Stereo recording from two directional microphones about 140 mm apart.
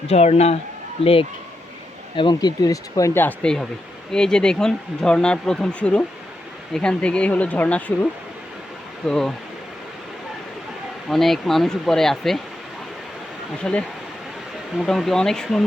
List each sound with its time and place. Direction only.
0.1 s speech: 50° left (ahead or behind)
2.1 s speech: 30° left (ahead or behind)
3.2 s speech: 5° left (ahead or behind)
9.0 s speech: 5° left (ahead or behind)
11.1 s speech: centre (ahead or behind)
13.6 s speech: 5° left (ahead or behind)